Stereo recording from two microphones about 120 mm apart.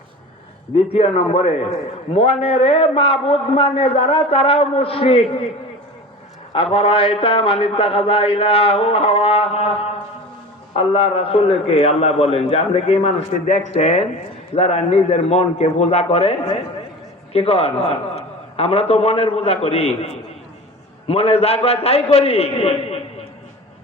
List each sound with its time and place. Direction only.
0.9 s a man's voice: 55° left (ahead or behind)
6.5 s a man's voice: 50° left (ahead or behind)
10.8 s a man's voice: 50° left (ahead or behind)
21.1 s a man's voice: 60° left (ahead or behind)